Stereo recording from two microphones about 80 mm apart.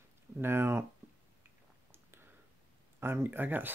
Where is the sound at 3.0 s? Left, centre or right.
Right.